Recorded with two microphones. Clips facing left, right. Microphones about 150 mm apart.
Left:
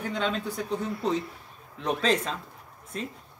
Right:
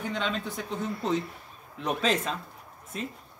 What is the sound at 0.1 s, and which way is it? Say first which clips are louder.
Speech: left 4 dB; centre (ahead or behind).